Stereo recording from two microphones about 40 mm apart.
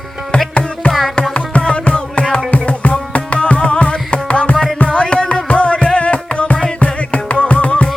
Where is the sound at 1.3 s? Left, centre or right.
Left.